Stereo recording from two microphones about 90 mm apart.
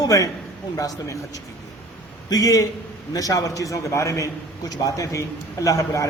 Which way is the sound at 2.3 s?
40° left (ahead or behind).